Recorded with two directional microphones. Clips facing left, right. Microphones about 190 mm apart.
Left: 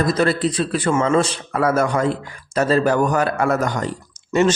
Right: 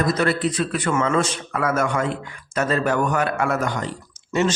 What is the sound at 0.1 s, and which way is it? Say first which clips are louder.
A man's voice: left 3 dB; 30° left (ahead or behind).